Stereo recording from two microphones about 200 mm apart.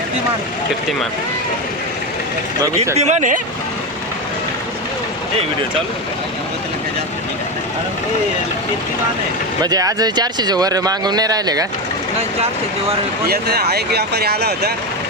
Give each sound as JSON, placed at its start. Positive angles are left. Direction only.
{"t": 2.6, "sound": "speech", "side_deg": -15}
{"t": 3.0, "sound": "speech", "side_deg": -35}
{"t": 9.6, "sound": "speech", "side_deg": -20}
{"t": 13.2, "sound": "speech", "side_deg": -50}